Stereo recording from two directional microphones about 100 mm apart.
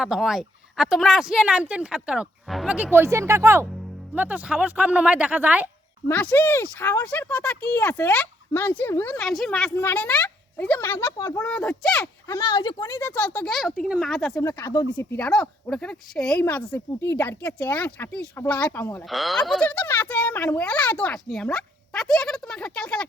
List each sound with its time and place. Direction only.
0.0 s speech: 5° right (ahead or behind)
3.0 s speech: 30° right (ahead or behind)
4.1 s speech: 15° right (ahead or behind)
6.1 s speech: 15° left (ahead or behind)
9.1 s speech: 5° left (ahead or behind); by 11.4 s 20° left (ahead or behind)
11.4 s speech: 10° left (ahead or behind)
12.3 s speech: 45° left (ahead or behind)
12.9 s speech: 20° left (ahead or behind)
13.5 s speech: centre (ahead or behind)
14.9 s speech: 20° left (ahead or behind)
15.7 s speech: 5° left (ahead or behind)
19.0 s speech: centre (ahead or behind)
19.7 s speech: 20° left (ahead or behind)